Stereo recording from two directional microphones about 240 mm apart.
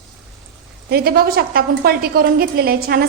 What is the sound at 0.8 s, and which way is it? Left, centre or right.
A woman's voice, right.